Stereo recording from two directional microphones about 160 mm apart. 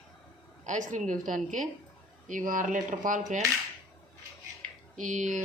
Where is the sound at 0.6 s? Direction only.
55° right (ahead or behind).